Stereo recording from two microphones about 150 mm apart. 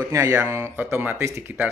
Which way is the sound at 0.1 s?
20° right (ahead or behind).